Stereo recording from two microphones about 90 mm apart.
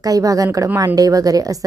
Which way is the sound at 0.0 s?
40° right (ahead or behind).